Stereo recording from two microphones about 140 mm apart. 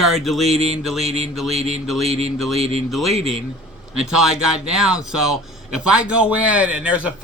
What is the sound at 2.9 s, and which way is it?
A man's voice, centre (ahead or behind).